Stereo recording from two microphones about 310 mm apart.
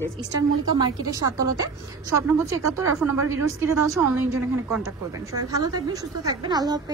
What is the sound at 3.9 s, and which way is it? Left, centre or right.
A woman's voice, centre.